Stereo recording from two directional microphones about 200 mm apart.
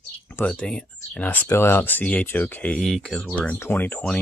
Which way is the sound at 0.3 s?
10° left (ahead or behind).